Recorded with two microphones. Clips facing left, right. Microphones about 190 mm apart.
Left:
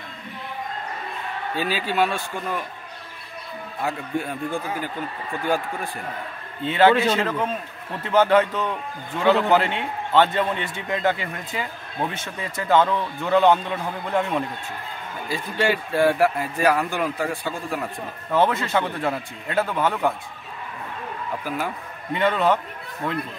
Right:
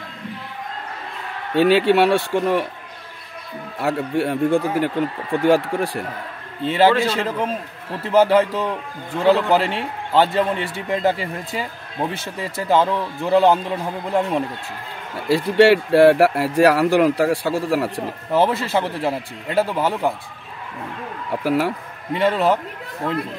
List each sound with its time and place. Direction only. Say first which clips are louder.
1.5 s speech: right 12 dB; 70° right (ahead or behind)
3.8 s speech: right 6 dB; 70° right (ahead or behind)
6.6 s a man's voice: right 1 dB; 30° right (ahead or behind)
15.2 s speech: right 10 dB; 85° right
18.0 s a man's voice: right 2 dB; 30° right (ahead or behind)
21.5 s speech: right 10 dB; 75° right (ahead or behind)
22.1 s a man's voice: right 3 dB; 30° right (ahead or behind)